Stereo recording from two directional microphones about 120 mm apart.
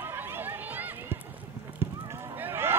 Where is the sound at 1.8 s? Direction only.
20° right (ahead or behind).